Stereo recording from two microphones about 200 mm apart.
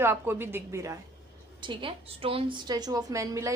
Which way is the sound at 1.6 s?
25° right (ahead or behind).